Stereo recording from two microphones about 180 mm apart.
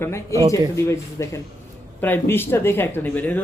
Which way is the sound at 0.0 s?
15° left (ahead or behind).